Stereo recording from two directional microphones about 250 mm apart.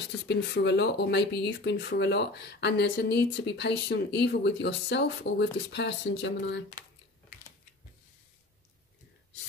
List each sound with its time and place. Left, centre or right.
0.0 s speech: left